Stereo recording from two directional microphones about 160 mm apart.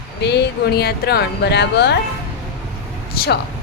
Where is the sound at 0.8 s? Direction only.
80° left.